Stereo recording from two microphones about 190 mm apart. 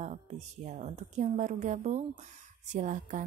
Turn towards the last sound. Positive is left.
turn(degrees=-40)  # may be behind; listen again after turning